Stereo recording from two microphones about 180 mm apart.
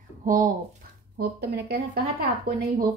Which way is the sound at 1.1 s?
55° right (ahead or behind).